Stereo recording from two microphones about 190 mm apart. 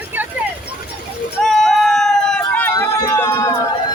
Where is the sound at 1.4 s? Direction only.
Centre (ahead or behind).